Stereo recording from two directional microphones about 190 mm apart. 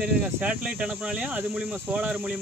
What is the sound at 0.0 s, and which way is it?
Speech, 5° right (ahead or behind).